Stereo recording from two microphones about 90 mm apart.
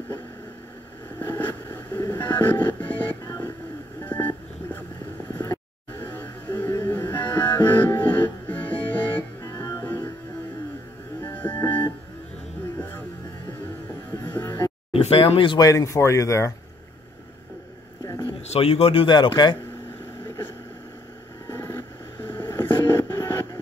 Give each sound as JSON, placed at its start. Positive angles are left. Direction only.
{"t": 1.2, "sound": "music", "side_deg": 25}
{"t": 4.0, "sound": "a sound", "side_deg": 20}
{"t": 6.1, "sound": "music", "side_deg": 25}
{"t": 9.4, "sound": "music", "side_deg": 35}
{"t": 9.8, "sound": "music", "side_deg": 25}
{"t": 11.1, "sound": "music", "side_deg": 20}
{"t": 14.2, "sound": "a sound", "side_deg": 20}
{"t": 14.9, "sound": "speech", "side_deg": 90}
{"t": 15.5, "sound": "speech", "side_deg": 40}
{"t": 18.6, "sound": "speech", "side_deg": 90}
{"t": 21.5, "sound": "a sound", "side_deg": 25}